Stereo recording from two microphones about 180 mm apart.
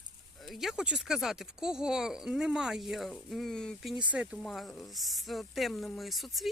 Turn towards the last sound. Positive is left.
turn(degrees=0)  # may be behind; listen again after turning